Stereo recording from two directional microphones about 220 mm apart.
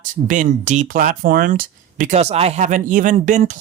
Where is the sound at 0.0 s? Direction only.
35° right (ahead or behind).